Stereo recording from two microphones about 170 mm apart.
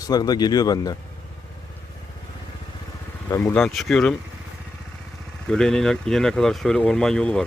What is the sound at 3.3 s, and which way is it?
Speech, 10° left (ahead or behind).